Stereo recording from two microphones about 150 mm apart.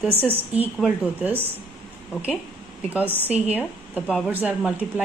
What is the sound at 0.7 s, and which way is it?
Speech, 10° right (ahead or behind).